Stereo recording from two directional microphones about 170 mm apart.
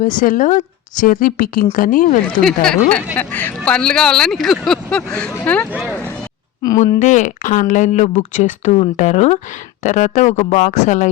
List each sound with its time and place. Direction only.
0.0 s speech: 55° left (ahead or behind)
2.4 s speech: 5° left (ahead or behind)
6.6 s speech: 20° left (ahead or behind)
7.0 s speech: 45° left (ahead or behind)